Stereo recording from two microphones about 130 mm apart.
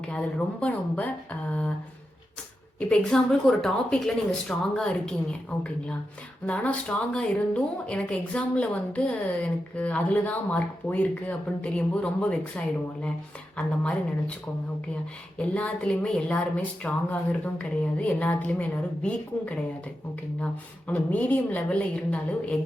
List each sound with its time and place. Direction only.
0.1 s speech: 10° left (ahead or behind)
2.7 s speech: 5° left (ahead or behind)
15.4 s speech: 10° left (ahead or behind)